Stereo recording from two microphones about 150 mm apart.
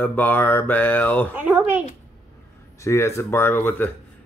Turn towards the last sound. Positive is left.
turn(degrees=15)  # may be behind; listen again after turning